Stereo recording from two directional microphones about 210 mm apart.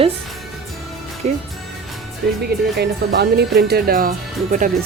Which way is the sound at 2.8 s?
50° right (ahead or behind).